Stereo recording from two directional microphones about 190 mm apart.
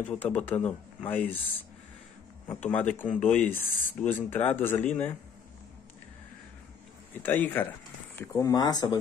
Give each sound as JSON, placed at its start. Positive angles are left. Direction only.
{"t": 0.0, "sound": "speech", "side_deg": 10}
{"t": 2.4, "sound": "speech", "side_deg": 10}
{"t": 7.2, "sound": "speech", "side_deg": 10}